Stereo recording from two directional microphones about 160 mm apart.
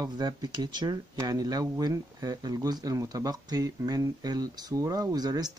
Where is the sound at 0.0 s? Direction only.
25° right (ahead or behind).